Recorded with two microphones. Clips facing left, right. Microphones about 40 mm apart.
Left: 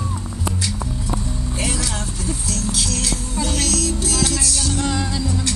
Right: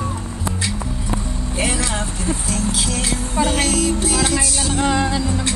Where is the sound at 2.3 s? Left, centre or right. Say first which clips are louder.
Right 3 dB; right.